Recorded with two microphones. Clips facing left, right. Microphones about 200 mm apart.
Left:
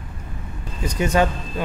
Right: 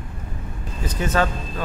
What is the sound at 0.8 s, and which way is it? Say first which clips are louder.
Speech: left 3 dB; 15° left (ahead or behind).